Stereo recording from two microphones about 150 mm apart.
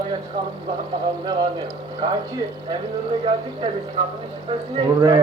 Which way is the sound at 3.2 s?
35° right (ahead or behind).